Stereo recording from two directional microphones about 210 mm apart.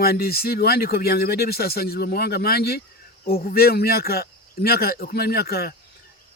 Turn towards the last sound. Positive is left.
turn(degrees=50)  # may be behind; listen again after turning